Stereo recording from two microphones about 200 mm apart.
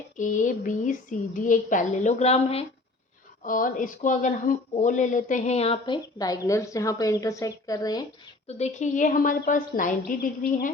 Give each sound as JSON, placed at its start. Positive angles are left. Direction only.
{"t": 0.2, "sound": "speech", "side_deg": 40}
{"t": 3.4, "sound": "speech", "side_deg": 45}
{"t": 8.4, "sound": "speech", "side_deg": 35}